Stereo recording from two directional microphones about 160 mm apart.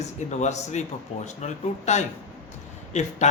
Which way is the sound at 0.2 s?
45° left (ahead or behind).